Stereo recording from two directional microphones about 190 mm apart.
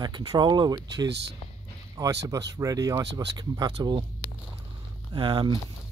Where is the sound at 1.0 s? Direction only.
65° right (ahead or behind).